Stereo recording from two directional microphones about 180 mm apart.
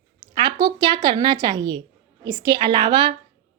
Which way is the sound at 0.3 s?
25° right (ahead or behind).